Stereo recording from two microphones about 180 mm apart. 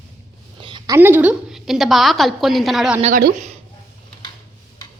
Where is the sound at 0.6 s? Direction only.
25° right (ahead or behind); by 2.9 s centre (ahead or behind).